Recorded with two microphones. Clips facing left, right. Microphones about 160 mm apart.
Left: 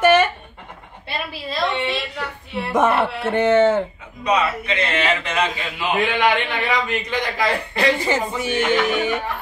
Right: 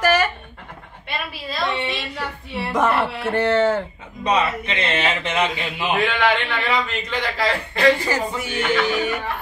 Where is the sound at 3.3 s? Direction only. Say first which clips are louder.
Left 3 dB; 20° left (ahead or behind).